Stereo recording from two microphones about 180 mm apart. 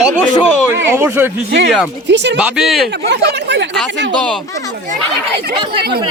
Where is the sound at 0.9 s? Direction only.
15° right (ahead or behind).